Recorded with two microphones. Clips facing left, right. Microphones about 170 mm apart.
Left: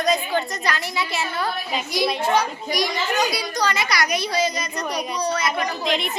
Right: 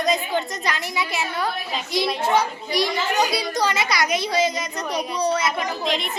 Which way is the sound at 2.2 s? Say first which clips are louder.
Even; 25° right (ahead or behind).